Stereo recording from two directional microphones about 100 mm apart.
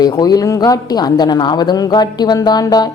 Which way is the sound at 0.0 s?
40° left (ahead or behind).